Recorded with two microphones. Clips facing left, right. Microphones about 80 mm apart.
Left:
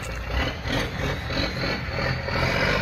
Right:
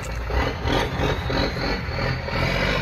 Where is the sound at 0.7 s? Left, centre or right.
Right.